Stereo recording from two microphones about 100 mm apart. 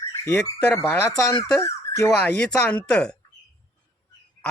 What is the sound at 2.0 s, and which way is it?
Speech, 15° left (ahead or behind).